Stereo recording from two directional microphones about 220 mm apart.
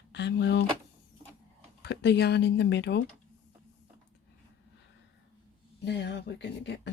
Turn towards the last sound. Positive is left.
turn(degrees=55)  # may be behind; listen again after turning